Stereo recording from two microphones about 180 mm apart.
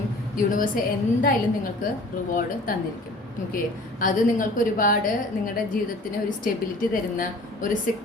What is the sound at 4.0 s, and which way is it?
A woman's voice, 50° left (ahead or behind).